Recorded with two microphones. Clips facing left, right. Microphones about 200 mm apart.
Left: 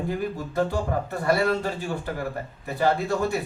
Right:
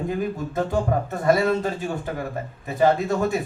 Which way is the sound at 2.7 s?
20° right (ahead or behind).